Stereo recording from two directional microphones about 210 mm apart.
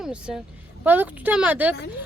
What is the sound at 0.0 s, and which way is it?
A woman's voice, 5° right (ahead or behind).